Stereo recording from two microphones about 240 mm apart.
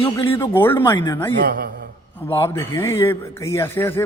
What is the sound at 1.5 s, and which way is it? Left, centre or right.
Speech, right.